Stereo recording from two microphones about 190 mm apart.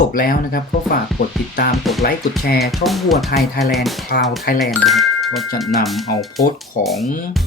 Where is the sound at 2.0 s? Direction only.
55° left (ahead or behind).